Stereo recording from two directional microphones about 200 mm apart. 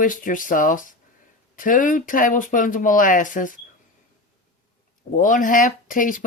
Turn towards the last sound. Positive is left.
turn(degrees=40)  # may be behind; listen again after turning